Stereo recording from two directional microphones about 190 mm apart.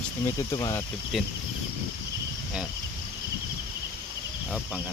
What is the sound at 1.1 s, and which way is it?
Speech, centre (ahead or behind).